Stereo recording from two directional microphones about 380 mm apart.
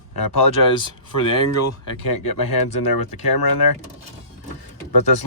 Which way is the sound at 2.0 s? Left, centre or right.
Left.